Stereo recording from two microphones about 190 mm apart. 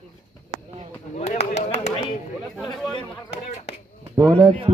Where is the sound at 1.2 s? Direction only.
35° left (ahead or behind).